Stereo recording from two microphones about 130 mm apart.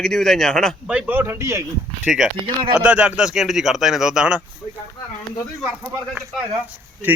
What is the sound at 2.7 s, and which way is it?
A man's voice, 10° right (ahead or behind).